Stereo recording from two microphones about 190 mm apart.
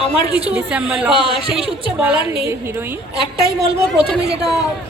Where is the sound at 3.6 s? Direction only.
Centre (ahead or behind).